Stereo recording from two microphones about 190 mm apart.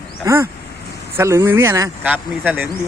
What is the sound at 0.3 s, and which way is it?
A man's voice, 15° right (ahead or behind).